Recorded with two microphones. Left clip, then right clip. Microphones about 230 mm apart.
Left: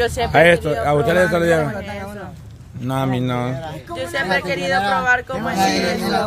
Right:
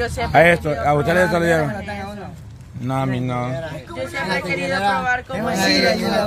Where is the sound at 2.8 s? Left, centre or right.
Centre.